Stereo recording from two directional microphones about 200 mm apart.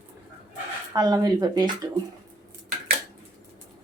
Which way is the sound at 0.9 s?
20° right (ahead or behind).